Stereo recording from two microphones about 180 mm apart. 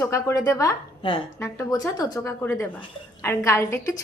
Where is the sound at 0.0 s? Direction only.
15° left (ahead or behind).